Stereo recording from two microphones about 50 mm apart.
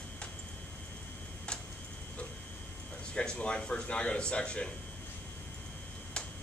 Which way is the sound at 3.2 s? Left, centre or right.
Centre.